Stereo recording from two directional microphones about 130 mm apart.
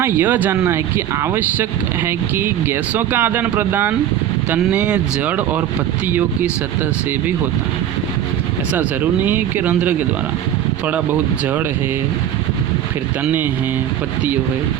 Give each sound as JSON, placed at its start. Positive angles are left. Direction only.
{"t": 0.0, "sound": "speech", "side_deg": -15}
{"t": 8.7, "sound": "speech", "side_deg": -15}
{"t": 13.2, "sound": "speech", "side_deg": -15}